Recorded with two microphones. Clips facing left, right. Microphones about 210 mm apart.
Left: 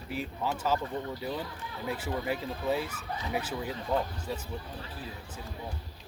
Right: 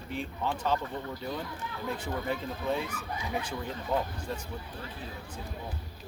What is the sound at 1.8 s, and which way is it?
Speech, 5° left (ahead or behind).